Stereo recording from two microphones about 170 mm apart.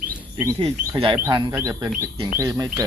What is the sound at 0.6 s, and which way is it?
Speech, 30° right (ahead or behind).